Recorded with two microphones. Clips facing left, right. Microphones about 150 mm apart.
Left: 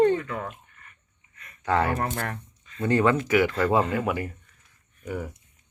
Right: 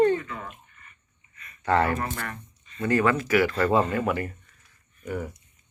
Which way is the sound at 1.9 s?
60° left (ahead or behind).